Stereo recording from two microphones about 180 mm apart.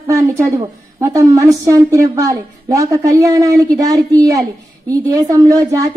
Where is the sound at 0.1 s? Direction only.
15° right (ahead or behind).